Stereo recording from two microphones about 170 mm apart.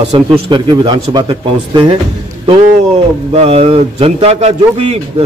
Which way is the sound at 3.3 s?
35° right (ahead or behind).